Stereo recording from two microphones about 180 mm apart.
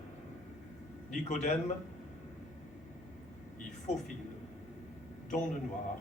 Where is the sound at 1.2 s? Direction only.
40° left (ahead or behind).